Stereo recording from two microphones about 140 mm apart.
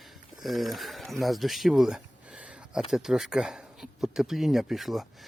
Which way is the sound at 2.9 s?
5° right (ahead or behind).